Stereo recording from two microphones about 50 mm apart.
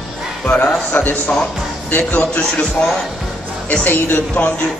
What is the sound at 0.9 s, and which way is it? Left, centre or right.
Speech, left.